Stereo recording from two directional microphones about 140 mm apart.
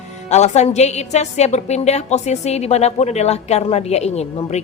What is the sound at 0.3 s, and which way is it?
A woman's voice, 55° left (ahead or behind).